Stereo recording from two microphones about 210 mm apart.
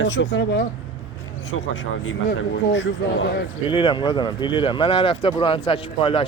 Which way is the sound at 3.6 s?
25° left (ahead or behind).